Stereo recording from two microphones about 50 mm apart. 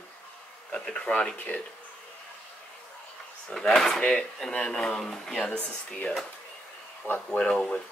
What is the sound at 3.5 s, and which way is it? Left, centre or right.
Speech, centre.